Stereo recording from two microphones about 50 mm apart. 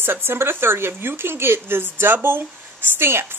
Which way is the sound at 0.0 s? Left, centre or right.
Right.